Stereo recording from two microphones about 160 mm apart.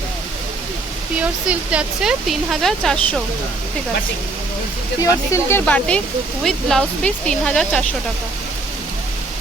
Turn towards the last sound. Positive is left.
turn(degrees=5)  # may be behind; listen again after turning